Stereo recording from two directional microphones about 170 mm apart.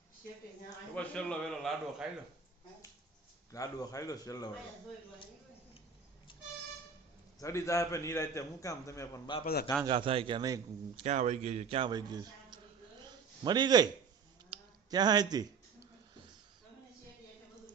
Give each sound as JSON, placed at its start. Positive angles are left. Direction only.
{"t": 0.9, "sound": "a man's voice", "side_deg": 5}
{"t": 3.5, "sound": "a man's voice", "side_deg": 20}
{"t": 7.3, "sound": "a man's voice", "side_deg": 20}
{"t": 9.4, "sound": "a man's voice", "side_deg": 65}
{"t": 9.8, "sound": "a man's voice", "side_deg": -30}
{"t": 10.9, "sound": "a man's voice", "side_deg": -40}
{"t": 13.1, "sound": "a sound", "side_deg": -25}